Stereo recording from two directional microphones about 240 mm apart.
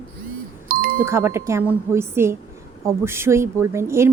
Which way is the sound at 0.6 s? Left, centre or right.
Right.